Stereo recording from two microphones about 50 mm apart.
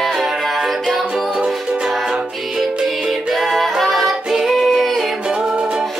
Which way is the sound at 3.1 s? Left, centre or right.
Centre.